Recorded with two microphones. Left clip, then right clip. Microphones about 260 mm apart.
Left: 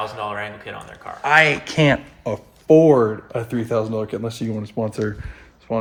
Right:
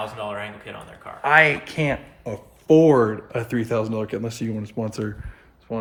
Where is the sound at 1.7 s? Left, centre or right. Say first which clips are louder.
Left 7 dB; left.